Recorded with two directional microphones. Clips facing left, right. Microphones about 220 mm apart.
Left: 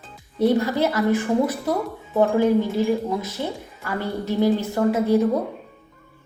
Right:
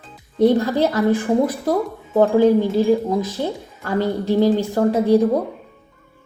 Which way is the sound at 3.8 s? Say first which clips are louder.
Right 6 dB; 15° right (ahead or behind).